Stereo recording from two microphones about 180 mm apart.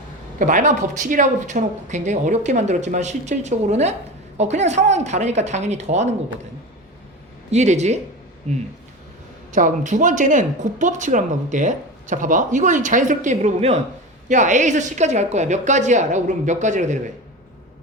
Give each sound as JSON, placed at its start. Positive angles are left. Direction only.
{"t": 0.3, "sound": "speech", "side_deg": -45}
{"t": 7.5, "sound": "speech", "side_deg": -40}
{"t": 9.5, "sound": "speech", "side_deg": -45}